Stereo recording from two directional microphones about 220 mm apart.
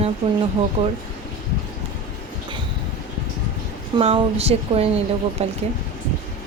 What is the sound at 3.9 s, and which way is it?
Speech, 25° right (ahead or behind).